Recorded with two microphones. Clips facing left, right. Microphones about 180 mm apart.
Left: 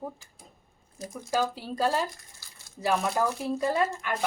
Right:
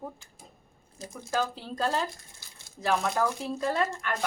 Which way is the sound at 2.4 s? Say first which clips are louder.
Right 1 dB; 20° right (ahead or behind).